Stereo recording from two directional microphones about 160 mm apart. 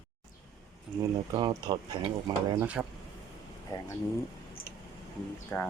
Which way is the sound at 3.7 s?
20° left (ahead or behind).